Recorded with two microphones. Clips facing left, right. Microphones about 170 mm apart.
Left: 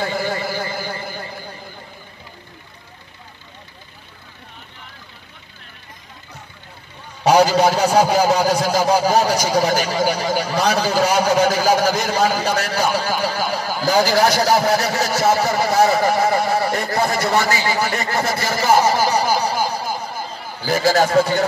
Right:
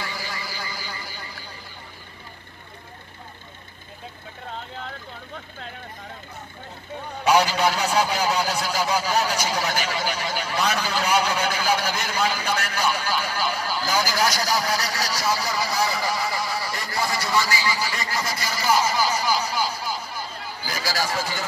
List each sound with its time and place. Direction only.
0.0 s a sound: 55° left (ahead or behind)
4.5 s vehicle: 90° right
7.2 s a man's voice: 40° left (ahead or behind)
14.2 s speech: 55° left (ahead or behind)